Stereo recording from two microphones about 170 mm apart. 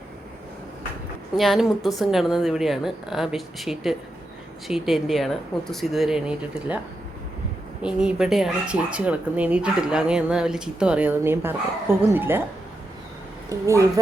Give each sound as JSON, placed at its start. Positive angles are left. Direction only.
{"t": 1.4, "sound": "a woman's voice", "side_deg": 0}
{"t": 7.8, "sound": "speech", "side_deg": -5}
{"t": 13.5, "sound": "speech", "side_deg": -20}